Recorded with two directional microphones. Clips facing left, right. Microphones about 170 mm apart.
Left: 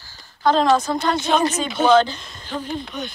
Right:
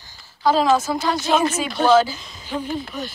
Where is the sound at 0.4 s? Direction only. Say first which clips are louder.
Even; 5° right (ahead or behind).